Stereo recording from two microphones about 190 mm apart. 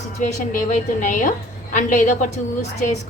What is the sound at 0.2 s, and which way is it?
A woman's voice, 40° left (ahead or behind).